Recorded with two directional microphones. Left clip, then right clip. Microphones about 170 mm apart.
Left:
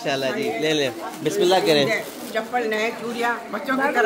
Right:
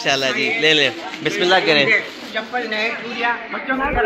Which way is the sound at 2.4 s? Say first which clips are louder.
Right 1 dB; 50° left (ahead or behind).